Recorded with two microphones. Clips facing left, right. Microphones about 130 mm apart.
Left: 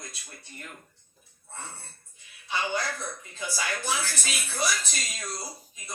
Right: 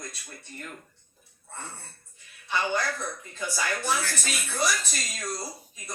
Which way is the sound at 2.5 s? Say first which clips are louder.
Right 2 dB; 50° right (ahead or behind).